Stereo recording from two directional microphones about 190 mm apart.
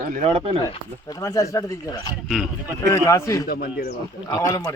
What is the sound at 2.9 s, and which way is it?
Speech, 15° left (ahead or behind).